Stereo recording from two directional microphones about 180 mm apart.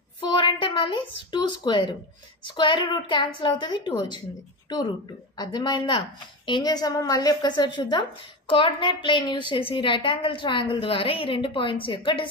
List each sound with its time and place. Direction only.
0.3 s a woman's voice: 25° left (ahead or behind)